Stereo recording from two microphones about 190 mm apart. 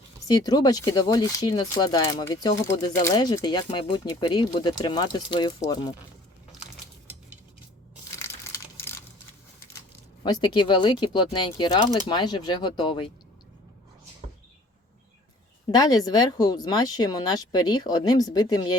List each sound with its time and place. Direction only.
0.3 s speech: 20° left (ahead or behind)
10.2 s speech: 25° left (ahead or behind)
15.7 s speech: 20° left (ahead or behind)